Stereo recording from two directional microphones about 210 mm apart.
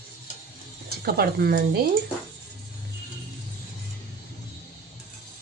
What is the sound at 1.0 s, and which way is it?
Speech, 45° right (ahead or behind).